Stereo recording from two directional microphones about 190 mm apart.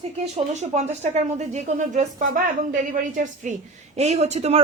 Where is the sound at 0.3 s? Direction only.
35° right (ahead or behind).